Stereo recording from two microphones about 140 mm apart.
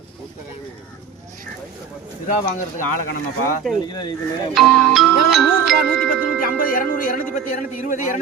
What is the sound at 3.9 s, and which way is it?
Speech, 35° left (ahead or behind).